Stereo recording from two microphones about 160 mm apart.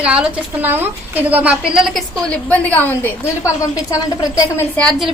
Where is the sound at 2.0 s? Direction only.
10° left (ahead or behind).